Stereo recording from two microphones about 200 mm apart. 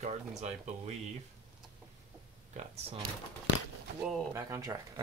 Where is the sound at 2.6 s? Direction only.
35° right (ahead or behind).